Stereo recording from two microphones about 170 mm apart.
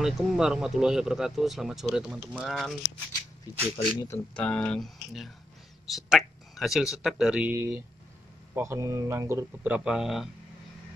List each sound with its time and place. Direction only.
0.0 s speech: 5° right (ahead or behind)
3.6 s speech: 35° left (ahead or behind)
4.1 s speech: 5° left (ahead or behind)
8.5 s speech: 15° right (ahead or behind)